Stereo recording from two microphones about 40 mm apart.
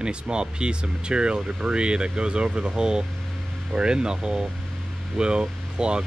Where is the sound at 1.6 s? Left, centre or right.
Right.